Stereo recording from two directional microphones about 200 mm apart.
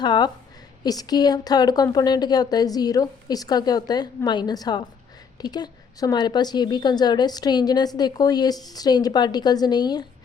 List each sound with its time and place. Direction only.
0.0 s a woman's voice: 20° left (ahead or behind)